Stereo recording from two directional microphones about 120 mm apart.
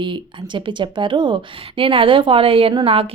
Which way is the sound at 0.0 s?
40° right (ahead or behind).